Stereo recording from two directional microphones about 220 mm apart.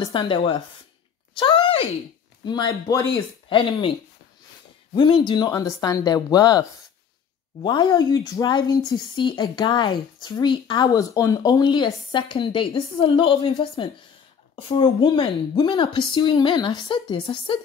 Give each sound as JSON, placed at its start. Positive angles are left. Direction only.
{"t": 0.0, "sound": "speech", "side_deg": 25}
{"t": 1.3, "sound": "a sound", "side_deg": 25}
{"t": 2.4, "sound": "speech", "side_deg": 20}
{"t": 4.9, "sound": "speech", "side_deg": 20}
{"t": 7.6, "sound": "speech", "side_deg": 20}